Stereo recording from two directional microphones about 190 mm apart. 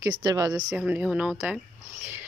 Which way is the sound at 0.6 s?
5° right (ahead or behind).